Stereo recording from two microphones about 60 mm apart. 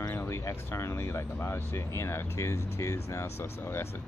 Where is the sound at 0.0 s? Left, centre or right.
Left.